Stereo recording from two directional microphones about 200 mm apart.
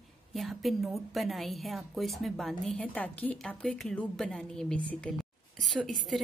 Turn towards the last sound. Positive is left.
turn(degrees=0)  # may be behind; listen again after turning